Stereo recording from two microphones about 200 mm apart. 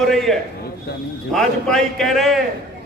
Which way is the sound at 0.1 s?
Centre (ahead or behind).